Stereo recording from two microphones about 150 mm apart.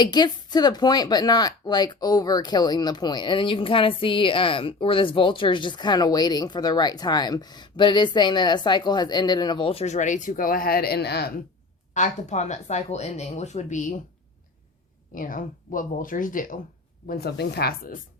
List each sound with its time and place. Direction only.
0.0 s speech: 30° left (ahead or behind); by 11.3 s 90° left
11.9 s speech: 50° left (ahead or behind)
15.1 s speech: 65° left (ahead or behind)
17.1 s speech: 90° left